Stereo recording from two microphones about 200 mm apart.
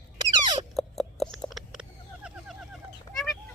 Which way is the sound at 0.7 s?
Centre (ahead or behind).